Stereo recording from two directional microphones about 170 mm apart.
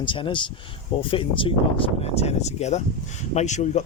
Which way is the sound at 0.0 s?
30° left (ahead or behind).